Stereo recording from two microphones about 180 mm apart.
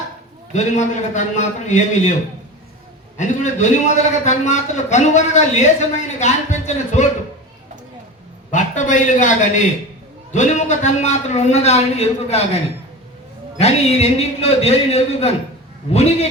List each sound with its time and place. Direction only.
0.5 s a man's voice: 40° left (ahead or behind)
3.2 s a man's voice: 40° left (ahead or behind)
8.4 s a man's voice: 45° left (ahead or behind)